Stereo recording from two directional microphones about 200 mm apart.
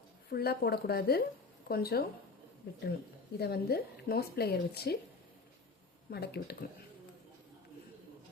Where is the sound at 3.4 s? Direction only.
55° left (ahead or behind).